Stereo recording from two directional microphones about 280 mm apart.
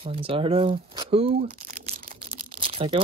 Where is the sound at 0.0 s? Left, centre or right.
Centre.